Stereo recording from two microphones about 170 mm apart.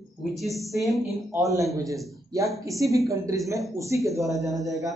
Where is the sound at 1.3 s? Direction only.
20° right (ahead or behind).